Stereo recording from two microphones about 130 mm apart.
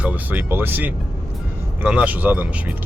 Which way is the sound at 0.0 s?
15° right (ahead or behind).